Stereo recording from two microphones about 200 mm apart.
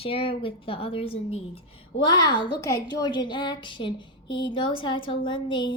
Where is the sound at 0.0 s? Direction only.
25° left (ahead or behind).